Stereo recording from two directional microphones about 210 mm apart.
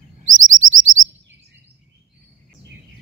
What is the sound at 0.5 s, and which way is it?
Chirp, 70° right (ahead or behind).